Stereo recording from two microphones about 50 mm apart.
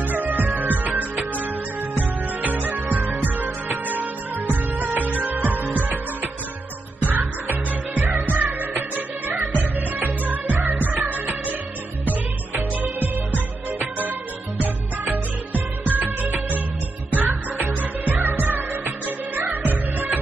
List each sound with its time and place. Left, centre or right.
0.0 s music: right
7.1 s music: right
12.5 s music: right